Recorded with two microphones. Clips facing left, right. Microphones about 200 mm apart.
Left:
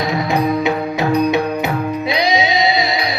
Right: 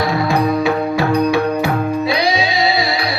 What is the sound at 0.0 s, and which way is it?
Music, 20° left (ahead or behind).